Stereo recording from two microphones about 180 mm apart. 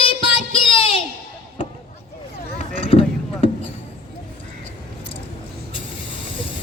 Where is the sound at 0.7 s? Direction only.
30° left (ahead or behind).